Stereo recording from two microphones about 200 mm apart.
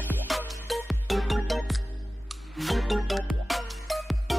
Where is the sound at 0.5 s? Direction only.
Centre (ahead or behind).